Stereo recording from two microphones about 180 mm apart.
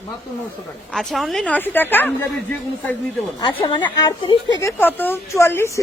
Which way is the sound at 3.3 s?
25° left (ahead or behind).